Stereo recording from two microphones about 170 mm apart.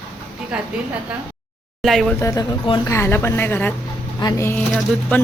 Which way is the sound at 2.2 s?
20° left (ahead or behind).